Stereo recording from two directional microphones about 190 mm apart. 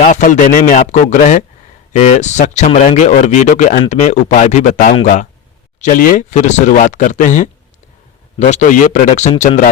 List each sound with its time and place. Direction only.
0.0 s speech: 40° left (ahead or behind)